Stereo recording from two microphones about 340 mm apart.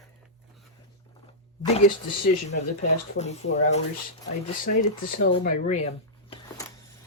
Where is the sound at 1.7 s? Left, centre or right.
Centre.